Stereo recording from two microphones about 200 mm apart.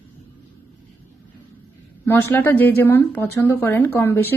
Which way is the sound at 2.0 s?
10° left (ahead or behind).